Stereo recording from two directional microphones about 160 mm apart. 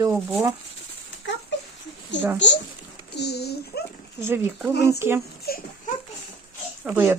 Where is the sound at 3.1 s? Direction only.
90° left.